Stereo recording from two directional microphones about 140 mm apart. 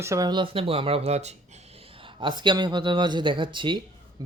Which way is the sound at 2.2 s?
35° right (ahead or behind).